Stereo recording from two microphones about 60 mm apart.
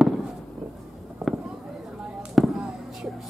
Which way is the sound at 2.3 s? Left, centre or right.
Centre.